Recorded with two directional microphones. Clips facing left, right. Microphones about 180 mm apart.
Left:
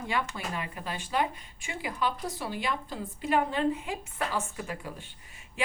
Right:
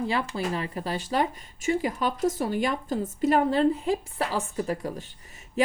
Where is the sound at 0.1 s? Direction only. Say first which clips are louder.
Right 5 dB; 35° right (ahead or behind).